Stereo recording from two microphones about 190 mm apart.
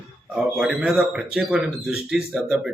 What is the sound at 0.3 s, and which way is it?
Speech, 5° right (ahead or behind).